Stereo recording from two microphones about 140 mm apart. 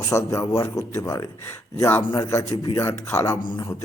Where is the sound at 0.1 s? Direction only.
20° left (ahead or behind).